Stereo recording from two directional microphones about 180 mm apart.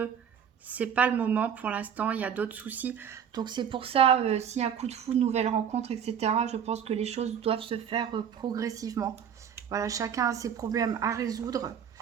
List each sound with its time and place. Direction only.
0.7 s speech: 10° right (ahead or behind)
3.3 s a woman's voice: 25° right (ahead or behind)